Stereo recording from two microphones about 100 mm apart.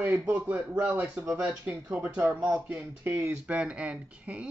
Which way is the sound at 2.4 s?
25° right (ahead or behind).